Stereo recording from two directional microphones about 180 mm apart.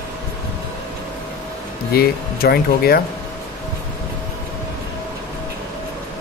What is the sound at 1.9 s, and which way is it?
Speech, 60° left (ahead or behind).